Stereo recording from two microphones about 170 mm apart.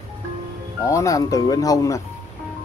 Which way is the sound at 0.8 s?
20° left (ahead or behind).